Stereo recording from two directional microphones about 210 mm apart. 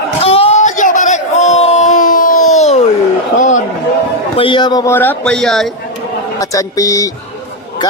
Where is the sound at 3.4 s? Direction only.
35° left (ahead or behind).